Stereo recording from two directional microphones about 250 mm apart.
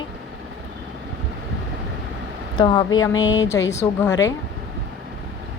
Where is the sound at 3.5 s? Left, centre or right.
Centre.